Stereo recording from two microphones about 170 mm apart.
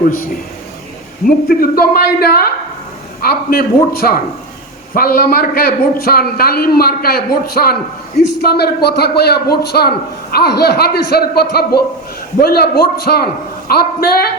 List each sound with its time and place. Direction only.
1.5 s a man's voice: 60° left (ahead or behind)